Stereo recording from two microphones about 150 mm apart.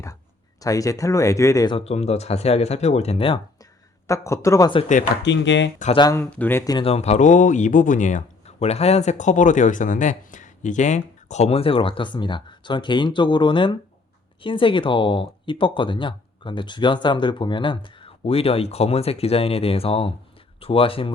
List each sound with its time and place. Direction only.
0.6 s speech: 20° left (ahead or behind)
1.7 s speech: 45° left (ahead or behind)
4.0 s speech: 20° left (ahead or behind)
5.9 s speech: 30° left (ahead or behind)
6.1 s speech: 15° left (ahead or behind)
6.7 s speech: 40° left (ahead or behind)